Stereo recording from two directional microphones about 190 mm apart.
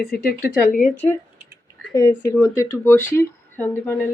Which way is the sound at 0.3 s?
45° left (ahead or behind).